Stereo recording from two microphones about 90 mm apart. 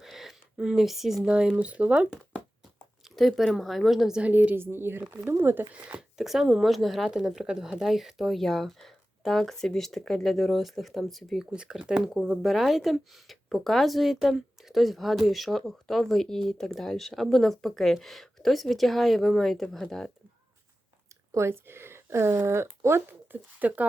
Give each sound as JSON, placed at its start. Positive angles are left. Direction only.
{"t": 0.0, "sound": "speech", "side_deg": -5}
{"t": 2.7, "sound": "speech", "side_deg": 0}
{"t": 4.3, "sound": "speech", "side_deg": -20}
{"t": 5.7, "sound": "speech", "side_deg": -10}
{"t": 21.3, "sound": "speech", "side_deg": -30}